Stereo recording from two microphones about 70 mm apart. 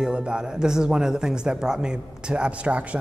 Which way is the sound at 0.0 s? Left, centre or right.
Centre.